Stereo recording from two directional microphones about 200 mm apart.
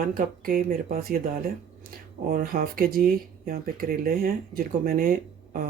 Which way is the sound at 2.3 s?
45° right (ahead or behind).